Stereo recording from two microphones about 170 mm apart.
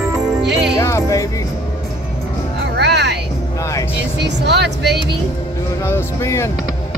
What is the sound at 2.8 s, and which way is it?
Music, 90° right.